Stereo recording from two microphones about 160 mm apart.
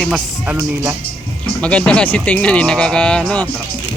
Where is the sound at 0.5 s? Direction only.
20° right (ahead or behind).